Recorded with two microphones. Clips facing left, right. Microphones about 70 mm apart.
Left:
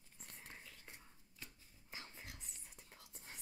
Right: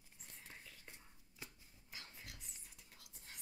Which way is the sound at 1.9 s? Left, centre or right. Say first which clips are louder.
Left 2 dB; left.